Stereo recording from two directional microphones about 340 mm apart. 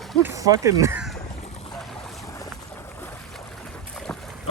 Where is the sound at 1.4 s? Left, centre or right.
Centre.